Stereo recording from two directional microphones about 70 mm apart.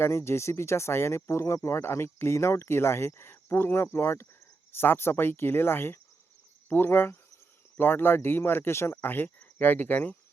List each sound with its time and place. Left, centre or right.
0.0 s speech: left